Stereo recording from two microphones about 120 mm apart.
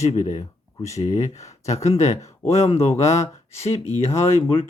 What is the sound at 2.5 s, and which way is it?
Speech, 60° left (ahead or behind).